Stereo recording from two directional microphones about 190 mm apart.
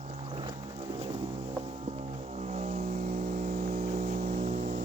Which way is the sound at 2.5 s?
35° right (ahead or behind).